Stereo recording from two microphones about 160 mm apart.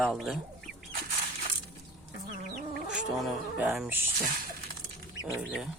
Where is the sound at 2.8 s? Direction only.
5° right (ahead or behind).